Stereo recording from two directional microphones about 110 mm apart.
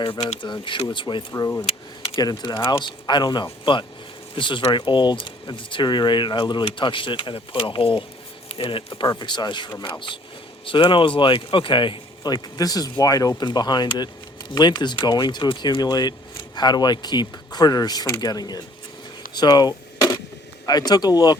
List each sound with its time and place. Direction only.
0.0 s speech: 45° left (ahead or behind)
1.3 s speech: 25° left (ahead or behind)
1.6 s speech: 60° left (ahead or behind)
2.1 s speech: 40° left (ahead or behind)
19.3 s a sound: 40° left (ahead or behind)
20.7 s speech: 35° left (ahead or behind)